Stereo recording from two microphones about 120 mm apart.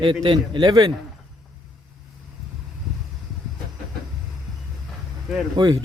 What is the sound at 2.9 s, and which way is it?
Vehicle, 5° right (ahead or behind).